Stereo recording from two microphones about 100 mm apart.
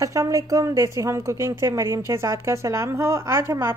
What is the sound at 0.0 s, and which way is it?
A woman's voice, 35° right (ahead or behind).